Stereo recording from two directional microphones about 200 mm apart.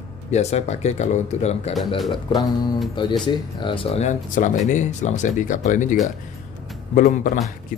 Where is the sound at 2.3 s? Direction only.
20° left (ahead or behind); by 5.9 s 40° left (ahead or behind).